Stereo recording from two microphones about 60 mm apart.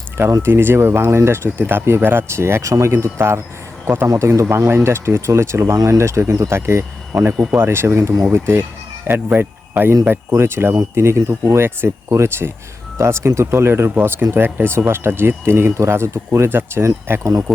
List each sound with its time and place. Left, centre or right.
0.4 s speech: right
2.9 s speech: right
3.8 s speech: right
4.1 s speech: right